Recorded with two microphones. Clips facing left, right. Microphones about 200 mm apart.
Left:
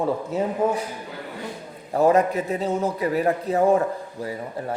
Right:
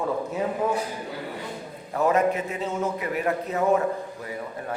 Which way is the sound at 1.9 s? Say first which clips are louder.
Left 3 dB; 35° left (ahead or behind).